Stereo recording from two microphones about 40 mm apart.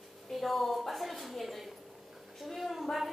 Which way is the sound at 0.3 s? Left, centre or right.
Centre.